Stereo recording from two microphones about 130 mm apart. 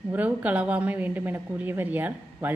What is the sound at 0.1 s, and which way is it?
A woman's voice, 10° right (ahead or behind).